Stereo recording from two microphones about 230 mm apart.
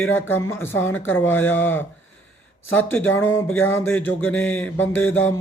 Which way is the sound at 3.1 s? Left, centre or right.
Left.